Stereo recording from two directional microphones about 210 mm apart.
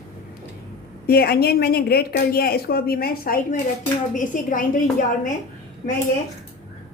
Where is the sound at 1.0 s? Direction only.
50° left (ahead or behind).